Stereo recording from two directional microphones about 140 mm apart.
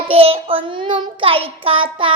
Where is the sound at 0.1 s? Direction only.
45° right (ahead or behind).